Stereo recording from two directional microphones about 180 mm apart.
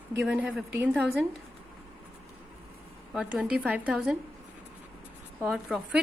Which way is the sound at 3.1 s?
5° right (ahead or behind).